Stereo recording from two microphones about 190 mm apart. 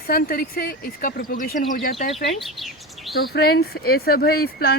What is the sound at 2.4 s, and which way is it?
Chirp, centre (ahead or behind).